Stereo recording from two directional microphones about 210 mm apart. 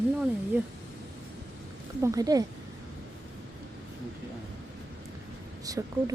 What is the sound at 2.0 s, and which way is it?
Speech, 15° right (ahead or behind).